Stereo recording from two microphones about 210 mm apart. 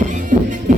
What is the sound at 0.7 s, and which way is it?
Music, 40° right (ahead or behind).